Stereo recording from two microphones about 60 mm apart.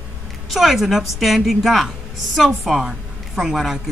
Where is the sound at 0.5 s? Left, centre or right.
Centre.